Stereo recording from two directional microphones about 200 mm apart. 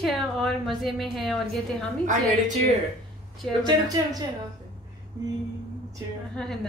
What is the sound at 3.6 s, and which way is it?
Speech, 20° right (ahead or behind).